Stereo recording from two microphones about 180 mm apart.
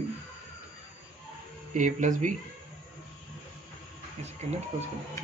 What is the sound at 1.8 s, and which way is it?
Speech, 45° right (ahead or behind).